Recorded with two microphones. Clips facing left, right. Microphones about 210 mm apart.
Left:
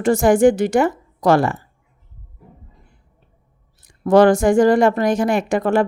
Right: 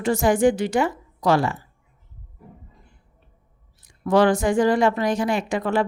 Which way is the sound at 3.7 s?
45° left (ahead or behind).